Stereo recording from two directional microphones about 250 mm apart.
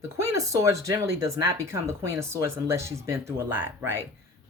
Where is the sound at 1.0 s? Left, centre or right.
Right.